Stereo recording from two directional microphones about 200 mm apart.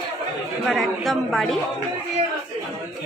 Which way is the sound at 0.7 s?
Centre (ahead or behind).